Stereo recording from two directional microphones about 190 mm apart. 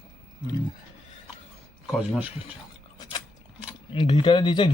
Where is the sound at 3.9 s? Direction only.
25° left (ahead or behind).